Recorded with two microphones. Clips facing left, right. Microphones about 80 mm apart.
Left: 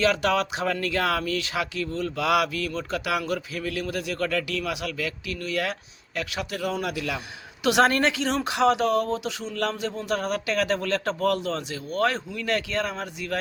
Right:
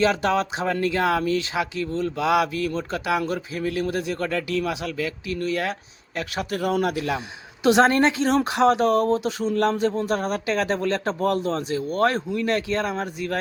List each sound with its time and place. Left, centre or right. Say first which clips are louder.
0.0 s speech: right 2 dB; right
6.9 s speech: right 4 dB; right